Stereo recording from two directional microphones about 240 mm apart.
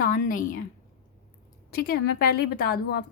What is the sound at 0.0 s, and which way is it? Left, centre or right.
Speech, left.